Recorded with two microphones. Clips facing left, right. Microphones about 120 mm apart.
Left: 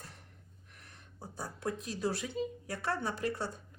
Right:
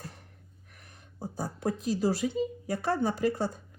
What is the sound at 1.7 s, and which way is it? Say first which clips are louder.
Speech: right 7 dB; 5° right (ahead or behind).